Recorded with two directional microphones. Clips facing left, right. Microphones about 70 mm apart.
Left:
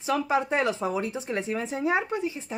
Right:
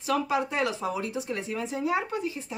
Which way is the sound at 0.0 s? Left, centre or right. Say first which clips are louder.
Left 1 dB; left.